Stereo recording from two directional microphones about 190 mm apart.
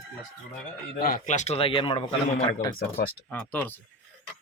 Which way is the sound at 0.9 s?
50° left (ahead or behind).